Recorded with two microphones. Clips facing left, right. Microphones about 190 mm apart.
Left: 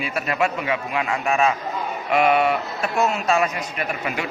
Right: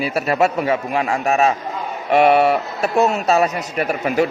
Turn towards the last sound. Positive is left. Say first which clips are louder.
# right 8 dB
turn(degrees=-40)  # may be behind; listen again after turning